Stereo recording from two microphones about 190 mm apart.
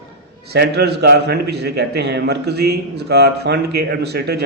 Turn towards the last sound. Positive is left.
turn(degrees=-60)  # may be behind; listen again after turning